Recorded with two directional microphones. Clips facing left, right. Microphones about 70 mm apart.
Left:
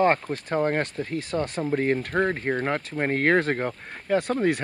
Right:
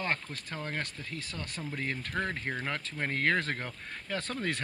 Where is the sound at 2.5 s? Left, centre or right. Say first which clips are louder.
Left 9 dB; left.